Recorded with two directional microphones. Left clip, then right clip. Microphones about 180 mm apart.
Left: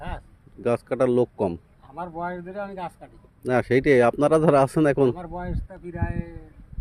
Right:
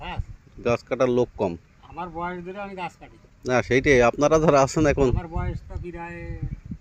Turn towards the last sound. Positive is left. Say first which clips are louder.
# left 1 dB
turn(degrees=5)  # may be behind; listen again after turning